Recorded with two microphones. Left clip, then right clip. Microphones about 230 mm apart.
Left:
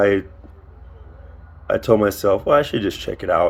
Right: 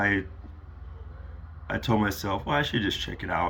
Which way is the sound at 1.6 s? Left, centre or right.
Left.